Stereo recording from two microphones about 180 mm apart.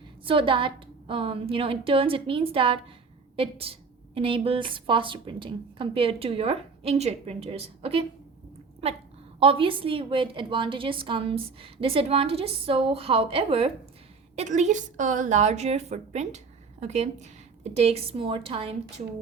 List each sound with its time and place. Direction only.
0.3 s a woman's voice: 30° right (ahead or behind)